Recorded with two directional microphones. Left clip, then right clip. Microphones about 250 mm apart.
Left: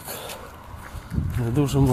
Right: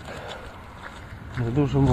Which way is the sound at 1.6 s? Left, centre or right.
Centre.